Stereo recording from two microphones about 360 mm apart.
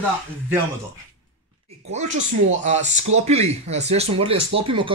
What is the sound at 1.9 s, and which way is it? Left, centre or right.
Speech, centre.